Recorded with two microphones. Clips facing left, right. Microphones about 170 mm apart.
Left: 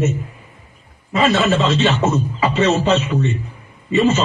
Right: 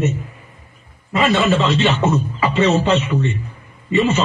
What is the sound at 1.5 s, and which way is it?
A man's voice, centre (ahead or behind).